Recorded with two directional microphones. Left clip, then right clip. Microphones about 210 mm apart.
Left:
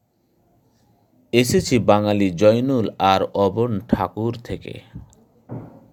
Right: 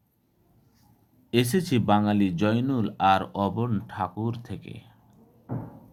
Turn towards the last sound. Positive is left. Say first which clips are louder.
# left 10 dB
turn(degrees=35)  # may be behind; listen again after turning